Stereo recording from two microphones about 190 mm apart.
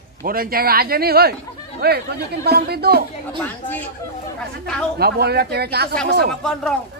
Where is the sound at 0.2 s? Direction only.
50° right (ahead or behind).